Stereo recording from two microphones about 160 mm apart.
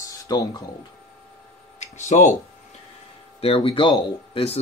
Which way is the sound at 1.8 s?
45° left (ahead or behind).